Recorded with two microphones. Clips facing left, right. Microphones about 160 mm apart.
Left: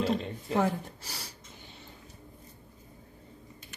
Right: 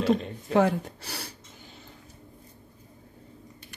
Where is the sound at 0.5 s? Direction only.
75° right (ahead or behind).